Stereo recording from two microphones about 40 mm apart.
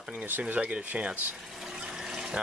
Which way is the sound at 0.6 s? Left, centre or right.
Right.